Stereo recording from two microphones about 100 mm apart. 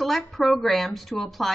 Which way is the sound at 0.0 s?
Centre (ahead or behind).